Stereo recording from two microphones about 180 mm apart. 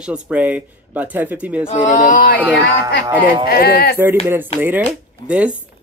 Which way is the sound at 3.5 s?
55° left (ahead or behind).